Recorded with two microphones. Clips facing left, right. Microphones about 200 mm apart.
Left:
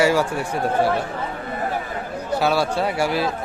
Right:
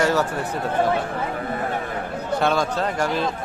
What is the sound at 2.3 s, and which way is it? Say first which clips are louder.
Speech: left 1 dB; 5° left (ahead or behind).